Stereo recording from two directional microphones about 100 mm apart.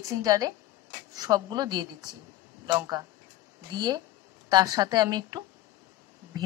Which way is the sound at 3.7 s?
45° right (ahead or behind).